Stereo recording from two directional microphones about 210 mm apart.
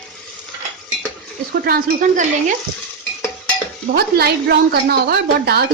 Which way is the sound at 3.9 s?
50° right (ahead or behind).